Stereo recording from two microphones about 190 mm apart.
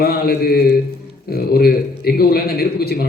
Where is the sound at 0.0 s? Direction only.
55° left (ahead or behind).